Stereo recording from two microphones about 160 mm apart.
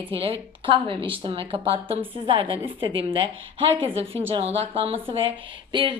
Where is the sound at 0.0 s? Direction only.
35° right (ahead or behind).